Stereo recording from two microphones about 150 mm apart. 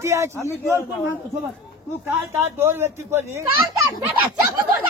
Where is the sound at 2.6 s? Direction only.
15° right (ahead or behind).